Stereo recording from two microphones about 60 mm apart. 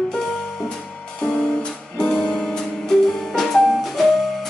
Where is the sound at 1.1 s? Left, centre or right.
Centre.